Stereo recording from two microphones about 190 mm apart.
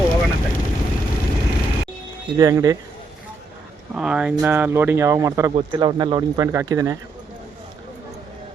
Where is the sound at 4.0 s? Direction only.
5° right (ahead or behind).